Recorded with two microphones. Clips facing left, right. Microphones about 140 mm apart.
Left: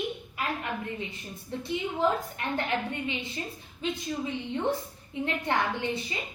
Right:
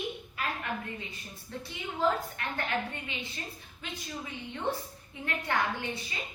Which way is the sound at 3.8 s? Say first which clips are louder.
Left 9 dB; 20° left (ahead or behind).